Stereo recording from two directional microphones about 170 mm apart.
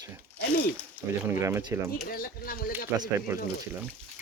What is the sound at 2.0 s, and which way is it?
Speech, 60° left (ahead or behind).